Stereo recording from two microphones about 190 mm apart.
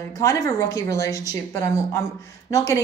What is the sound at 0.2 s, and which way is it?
Speech, 15° left (ahead or behind).